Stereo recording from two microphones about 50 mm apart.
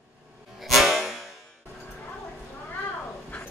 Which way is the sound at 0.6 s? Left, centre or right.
Centre.